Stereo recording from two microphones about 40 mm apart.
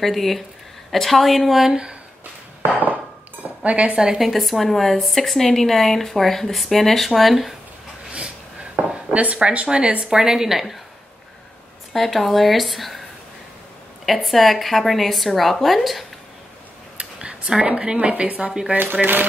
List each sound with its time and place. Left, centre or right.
0.0 s a woman's voice: centre
3.4 s speech: right
4.2 s a woman's voice: centre
8.7 s a sound: right
9.7 s a woman's voice: right; by 10.8 s centre
11.9 s a woman's voice: centre
14.0 s a woman's voice: centre
17.0 s a sound: right
18.0 s speech: right
18.8 s speech: right